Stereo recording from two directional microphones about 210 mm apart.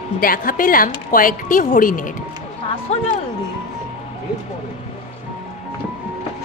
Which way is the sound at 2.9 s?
30° left (ahead or behind).